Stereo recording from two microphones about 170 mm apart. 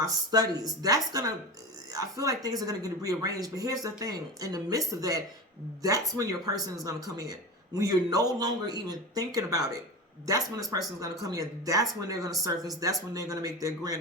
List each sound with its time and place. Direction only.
0.0 s speech: 20° right (ahead or behind)
10.7 s speech: 20° right (ahead or behind)